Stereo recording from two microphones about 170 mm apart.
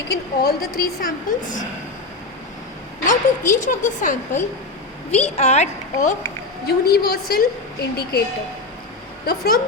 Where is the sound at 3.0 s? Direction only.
50° left (ahead or behind).